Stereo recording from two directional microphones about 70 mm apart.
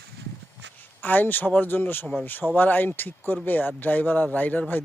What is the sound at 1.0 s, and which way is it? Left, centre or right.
Speech, left.